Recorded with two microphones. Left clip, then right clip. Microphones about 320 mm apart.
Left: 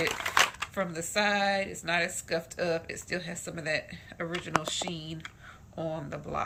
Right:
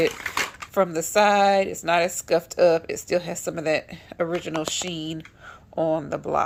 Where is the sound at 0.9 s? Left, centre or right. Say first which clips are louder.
Right 9 dB; centre.